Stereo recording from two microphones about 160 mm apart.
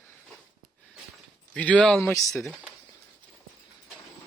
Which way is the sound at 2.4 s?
Centre (ahead or behind).